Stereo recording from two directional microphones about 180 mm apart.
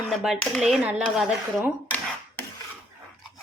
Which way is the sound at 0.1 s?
Centre (ahead or behind).